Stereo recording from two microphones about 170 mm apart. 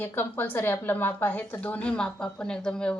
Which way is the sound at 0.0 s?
10° left (ahead or behind).